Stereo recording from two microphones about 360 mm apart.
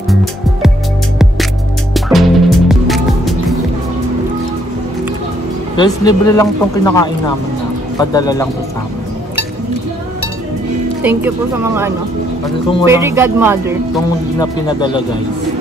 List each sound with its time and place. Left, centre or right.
0.1 s music: centre
2.0 s music: centre
5.8 s speech: centre
11.0 s speech: centre
14.4 s speech: centre